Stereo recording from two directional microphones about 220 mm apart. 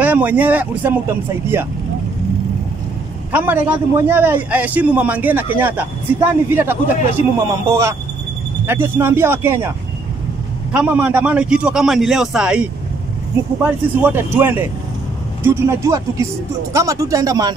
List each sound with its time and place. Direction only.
0.0 s a man's voice: 5° right (ahead or behind)
3.3 s a man's voice: 10° right (ahead or behind)
8.6 s a man's voice: 10° right (ahead or behind)
10.7 s a man's voice: 5° right (ahead or behind)
13.7 s a man's voice: 10° right (ahead or behind)